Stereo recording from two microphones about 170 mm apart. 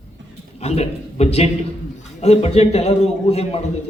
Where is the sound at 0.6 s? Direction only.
40° left (ahead or behind).